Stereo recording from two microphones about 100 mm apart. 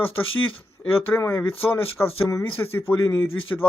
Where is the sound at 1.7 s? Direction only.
20° left (ahead or behind).